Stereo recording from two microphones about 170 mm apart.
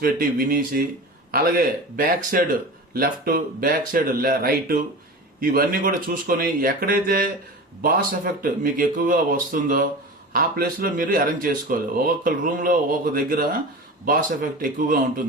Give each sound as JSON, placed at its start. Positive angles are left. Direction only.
{"t": 0.0, "sound": "speech", "side_deg": -55}